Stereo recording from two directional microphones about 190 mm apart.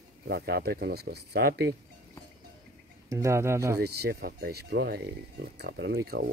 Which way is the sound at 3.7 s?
60° right (ahead or behind).